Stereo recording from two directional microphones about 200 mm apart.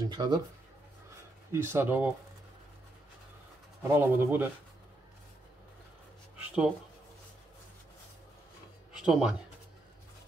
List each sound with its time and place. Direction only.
0.1 s speech: 20° right (ahead or behind)
1.5 s speech: 10° right (ahead or behind)
3.9 s speech: 10° right (ahead or behind)
6.3 s writing: 5° right (ahead or behind)
8.9 s speech: 5° right (ahead or behind)